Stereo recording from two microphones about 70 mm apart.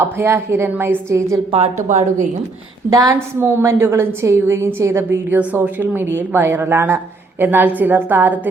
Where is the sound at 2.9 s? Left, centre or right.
Right.